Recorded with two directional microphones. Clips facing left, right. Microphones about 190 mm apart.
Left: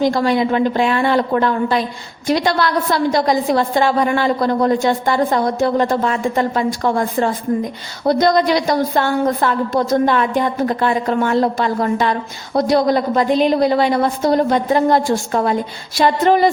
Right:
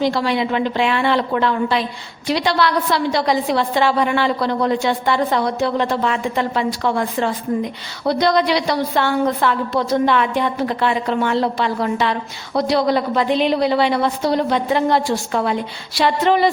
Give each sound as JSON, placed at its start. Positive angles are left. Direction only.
{"t": 0.0, "sound": "a woman's voice", "side_deg": 45}